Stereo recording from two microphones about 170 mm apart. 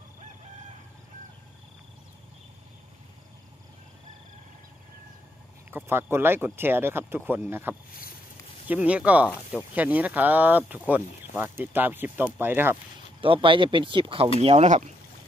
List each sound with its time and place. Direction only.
5.7 s speech: 15° right (ahead or behind)
13.2 s speech: 30° right (ahead or behind)